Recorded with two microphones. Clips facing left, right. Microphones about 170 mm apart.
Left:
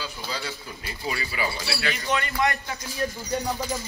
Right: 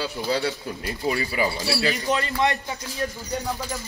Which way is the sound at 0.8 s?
40° right (ahead or behind).